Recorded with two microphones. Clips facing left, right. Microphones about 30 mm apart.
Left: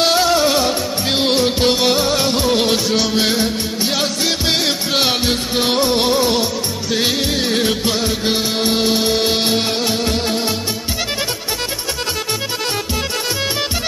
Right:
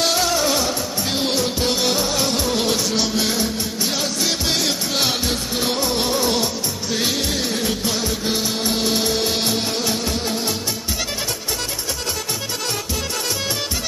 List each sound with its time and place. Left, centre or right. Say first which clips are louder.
0.0 s music: left 5 dB; left
1.7 s music: left 5 dB; left
7.5 s music: left 5 dB; left